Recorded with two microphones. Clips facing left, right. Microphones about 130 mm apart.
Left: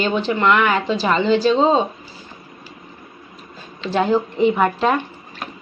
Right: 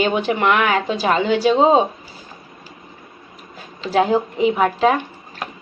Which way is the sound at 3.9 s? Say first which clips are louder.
Right 1 dB; 5° right (ahead or behind).